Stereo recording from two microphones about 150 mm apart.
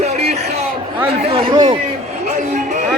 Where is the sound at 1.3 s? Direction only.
40° right (ahead or behind).